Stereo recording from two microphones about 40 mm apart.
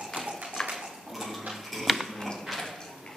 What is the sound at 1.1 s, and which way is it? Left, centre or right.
Cutlery, centre.